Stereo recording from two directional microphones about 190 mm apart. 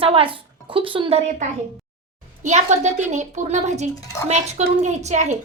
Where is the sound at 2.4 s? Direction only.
40° right (ahead or behind).